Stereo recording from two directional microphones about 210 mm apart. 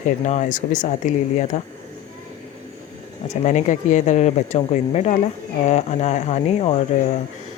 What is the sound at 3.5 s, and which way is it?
Speech, 35° left (ahead or behind).